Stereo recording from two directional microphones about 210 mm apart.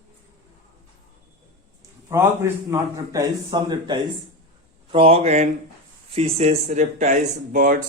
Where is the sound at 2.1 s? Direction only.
10° right (ahead or behind); by 7.7 s 40° right (ahead or behind).